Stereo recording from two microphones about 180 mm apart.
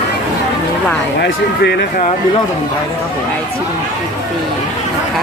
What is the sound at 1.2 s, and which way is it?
Speech, 65° left (ahead or behind).